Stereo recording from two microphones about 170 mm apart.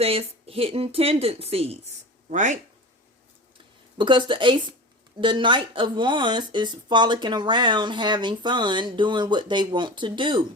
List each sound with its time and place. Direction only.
0.0 s speech: 35° right (ahead or behind)
2.3 s speech: 45° right (ahead or behind)
3.9 s speech: 30° right (ahead or behind)